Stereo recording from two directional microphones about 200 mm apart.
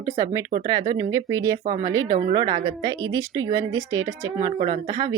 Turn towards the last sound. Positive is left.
turn(degrees=-20)  # may be behind; listen again after turning